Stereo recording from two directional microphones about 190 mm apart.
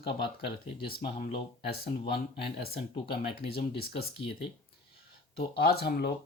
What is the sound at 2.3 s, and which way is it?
Speech, 55° left (ahead or behind).